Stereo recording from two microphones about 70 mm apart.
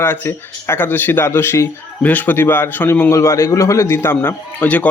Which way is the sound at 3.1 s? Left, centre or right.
Left.